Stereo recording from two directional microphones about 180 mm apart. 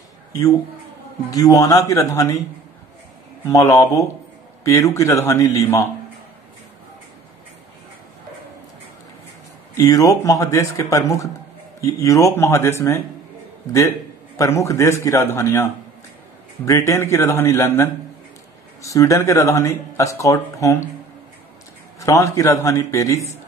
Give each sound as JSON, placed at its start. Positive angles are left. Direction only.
{"t": 1.3, "sound": "speech", "side_deg": 20}
{"t": 3.4, "sound": "speech", "side_deg": 15}
{"t": 9.8, "sound": "speech", "side_deg": 20}
{"t": 22.0, "sound": "speech", "side_deg": 15}